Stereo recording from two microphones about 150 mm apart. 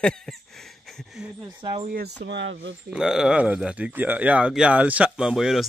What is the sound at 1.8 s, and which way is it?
Speech, 75° right (ahead or behind).